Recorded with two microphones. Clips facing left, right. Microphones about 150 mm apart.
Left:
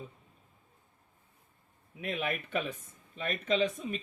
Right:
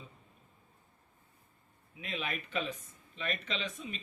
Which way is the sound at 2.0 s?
55° left (ahead or behind).